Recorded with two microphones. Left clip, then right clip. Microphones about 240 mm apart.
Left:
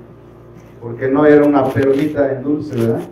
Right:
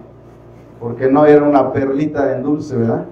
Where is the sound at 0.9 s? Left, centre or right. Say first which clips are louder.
Right 1 dB; right.